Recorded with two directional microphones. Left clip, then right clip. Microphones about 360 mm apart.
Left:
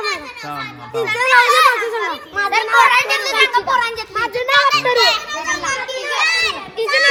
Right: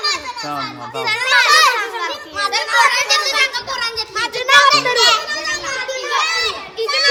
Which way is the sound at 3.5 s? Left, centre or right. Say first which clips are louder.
Left 6 dB; centre.